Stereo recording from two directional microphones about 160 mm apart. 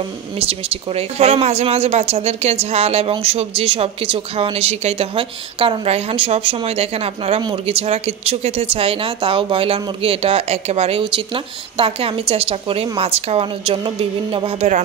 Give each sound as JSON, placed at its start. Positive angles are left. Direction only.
{"t": 0.4, "sound": "speech", "side_deg": -40}